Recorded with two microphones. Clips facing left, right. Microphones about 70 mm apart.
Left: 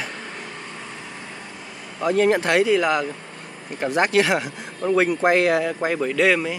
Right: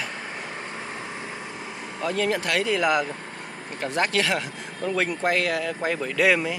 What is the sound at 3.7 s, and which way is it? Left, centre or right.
Speech, centre.